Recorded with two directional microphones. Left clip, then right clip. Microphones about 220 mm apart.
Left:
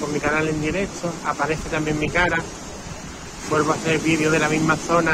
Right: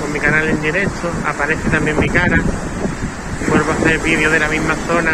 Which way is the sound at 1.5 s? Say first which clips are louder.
Right 7 dB; 15° left (ahead or behind).